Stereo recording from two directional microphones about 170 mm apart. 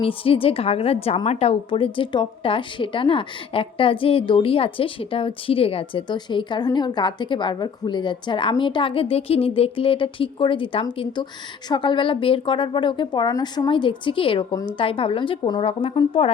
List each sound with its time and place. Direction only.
0.0 s a woman's voice: 30° left (ahead or behind)